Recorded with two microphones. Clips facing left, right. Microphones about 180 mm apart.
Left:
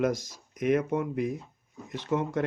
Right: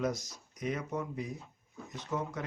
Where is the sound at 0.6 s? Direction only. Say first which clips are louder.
Left 10 dB; 70° left (ahead or behind).